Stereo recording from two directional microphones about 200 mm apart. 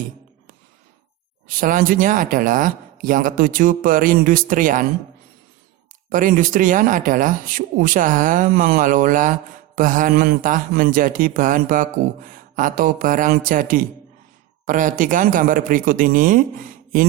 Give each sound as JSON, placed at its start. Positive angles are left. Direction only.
{"t": 1.5, "sound": "a man's voice", "side_deg": -45}
{"t": 6.1, "sound": "a man's voice", "side_deg": -40}